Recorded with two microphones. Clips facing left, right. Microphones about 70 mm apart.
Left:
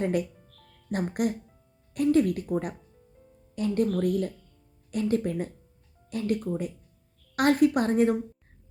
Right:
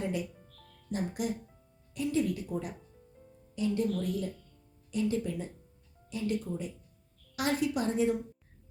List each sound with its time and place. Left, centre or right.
0.0 s a woman's voice: left
2.9 s music: centre
3.5 s a woman's voice: left